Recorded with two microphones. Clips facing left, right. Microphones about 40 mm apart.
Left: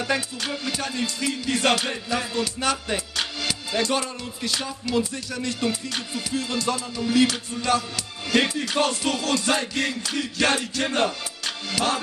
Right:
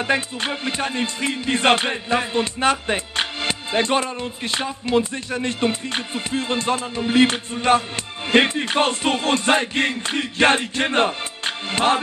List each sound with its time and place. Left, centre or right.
0.0 s music: right